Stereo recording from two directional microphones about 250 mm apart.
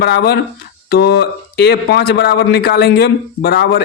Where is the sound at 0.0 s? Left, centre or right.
Left.